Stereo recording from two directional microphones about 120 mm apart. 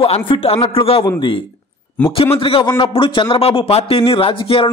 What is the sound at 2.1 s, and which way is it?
A man's voice, 50° left (ahead or behind).